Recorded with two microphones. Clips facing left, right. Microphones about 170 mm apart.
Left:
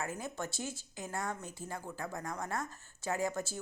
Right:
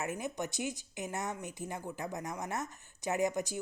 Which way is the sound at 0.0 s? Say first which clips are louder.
Right 2 dB; 20° right (ahead or behind).